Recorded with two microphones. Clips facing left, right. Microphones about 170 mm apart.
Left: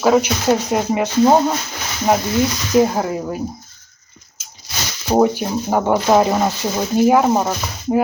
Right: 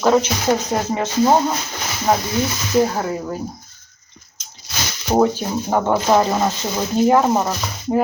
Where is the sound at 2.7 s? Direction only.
15° left (ahead or behind).